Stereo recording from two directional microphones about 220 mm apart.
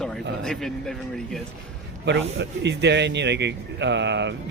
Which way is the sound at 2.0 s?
50° right (ahead or behind).